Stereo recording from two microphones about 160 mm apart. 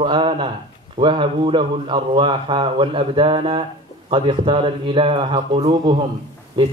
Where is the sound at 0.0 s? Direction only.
30° right (ahead or behind).